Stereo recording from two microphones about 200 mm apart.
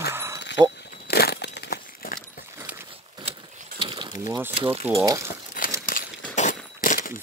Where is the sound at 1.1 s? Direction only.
55° left (ahead or behind).